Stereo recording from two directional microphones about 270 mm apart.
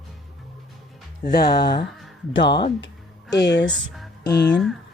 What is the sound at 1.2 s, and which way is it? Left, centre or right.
A woman's voice, left.